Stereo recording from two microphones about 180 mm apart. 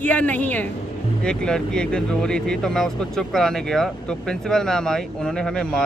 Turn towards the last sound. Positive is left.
turn(degrees=5)  # may be behind; listen again after turning